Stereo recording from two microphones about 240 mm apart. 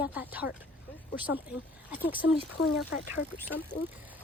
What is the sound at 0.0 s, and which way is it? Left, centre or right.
Speech, centre.